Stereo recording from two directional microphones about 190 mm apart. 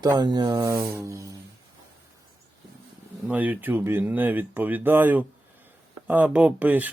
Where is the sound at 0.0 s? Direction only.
20° right (ahead or behind).